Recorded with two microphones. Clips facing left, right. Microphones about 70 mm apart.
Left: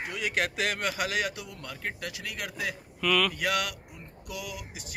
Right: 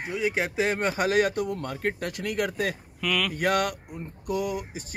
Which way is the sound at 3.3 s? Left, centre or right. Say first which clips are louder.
Right 5 dB; right.